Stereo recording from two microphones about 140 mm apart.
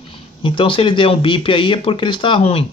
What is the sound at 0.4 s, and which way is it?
Speech, 40° left (ahead or behind).